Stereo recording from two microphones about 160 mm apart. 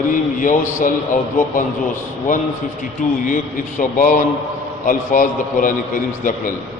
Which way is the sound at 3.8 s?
55° left (ahead or behind).